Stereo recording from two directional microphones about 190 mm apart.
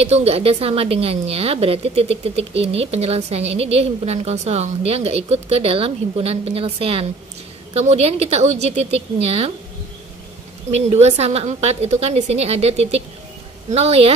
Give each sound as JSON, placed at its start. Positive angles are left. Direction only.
{"t": 0.0, "sound": "a woman's voice", "side_deg": -35}
{"t": 10.7, "sound": "a woman's voice", "side_deg": -35}